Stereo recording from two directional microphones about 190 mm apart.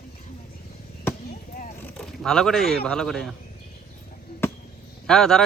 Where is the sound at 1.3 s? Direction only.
45° left (ahead or behind).